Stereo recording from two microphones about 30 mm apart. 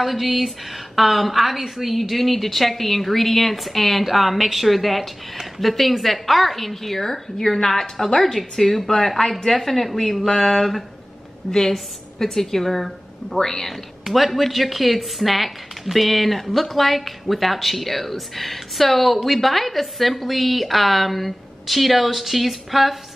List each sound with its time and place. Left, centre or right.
0.0 s a woman's voice: centre
8.2 s a woman's voice: centre
12.2 s a woman's voice: centre
13.4 s a woman's voice: centre
14.0 s a woman's voice: centre